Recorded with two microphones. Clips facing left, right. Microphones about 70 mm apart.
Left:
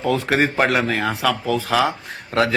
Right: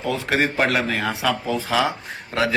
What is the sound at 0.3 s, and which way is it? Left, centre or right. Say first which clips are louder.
Speech: even; centre.